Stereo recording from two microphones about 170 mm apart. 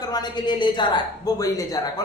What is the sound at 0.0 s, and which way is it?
A man's voice, 25° left (ahead or behind).